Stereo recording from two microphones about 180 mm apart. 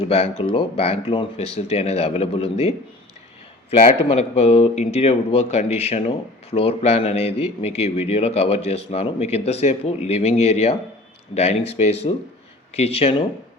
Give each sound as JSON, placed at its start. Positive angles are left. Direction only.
{"t": 0.0, "sound": "speech", "side_deg": 35}